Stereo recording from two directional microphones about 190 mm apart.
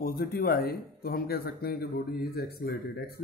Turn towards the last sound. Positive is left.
turn(degrees=55)  # may be behind; listen again after turning